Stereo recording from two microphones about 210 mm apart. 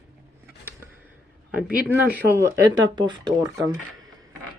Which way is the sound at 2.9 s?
20° right (ahead or behind).